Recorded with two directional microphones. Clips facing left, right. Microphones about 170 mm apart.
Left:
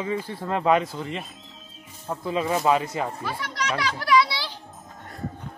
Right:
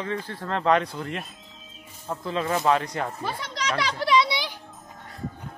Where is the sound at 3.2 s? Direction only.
20° right (ahead or behind).